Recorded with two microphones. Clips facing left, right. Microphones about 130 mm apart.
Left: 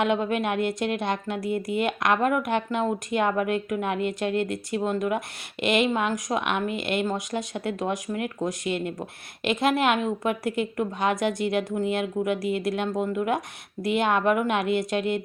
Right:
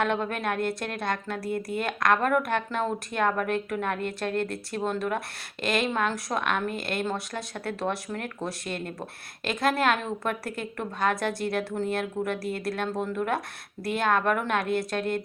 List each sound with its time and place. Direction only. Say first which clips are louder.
0.0 s a woman's voice: left 3 dB; 15° left (ahead or behind)
5.9 s a woman's voice: left 2 dB; 10° left (ahead or behind)